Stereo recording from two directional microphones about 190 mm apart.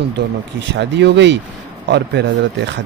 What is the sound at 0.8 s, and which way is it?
Speech, 65° right (ahead or behind).